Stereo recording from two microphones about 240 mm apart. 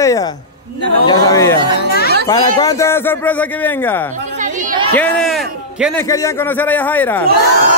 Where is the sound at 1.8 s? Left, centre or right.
Left.